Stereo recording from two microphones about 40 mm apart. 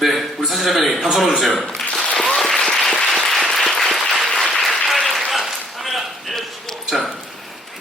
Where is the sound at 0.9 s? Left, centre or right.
Centre.